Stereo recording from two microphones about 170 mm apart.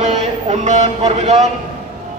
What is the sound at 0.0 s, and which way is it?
Speech, 40° right (ahead or behind).